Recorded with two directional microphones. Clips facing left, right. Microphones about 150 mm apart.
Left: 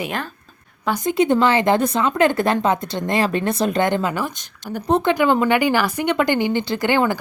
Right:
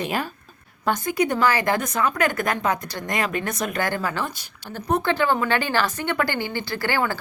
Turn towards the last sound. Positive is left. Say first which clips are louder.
# left 6 dB
turn(degrees=20)  # may be behind; listen again after turning